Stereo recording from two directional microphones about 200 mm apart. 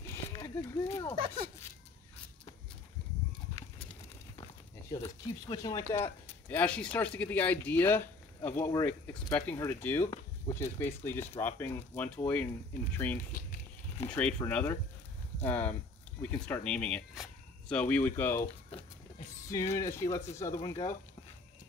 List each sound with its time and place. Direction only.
0.0 s a sound: 15° left (ahead or behind)
5.0 s speech: 20° left (ahead or behind)
19.7 s speech: 15° left (ahead or behind)